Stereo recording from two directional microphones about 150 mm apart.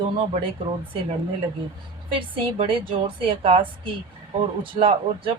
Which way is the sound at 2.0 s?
35° right (ahead or behind).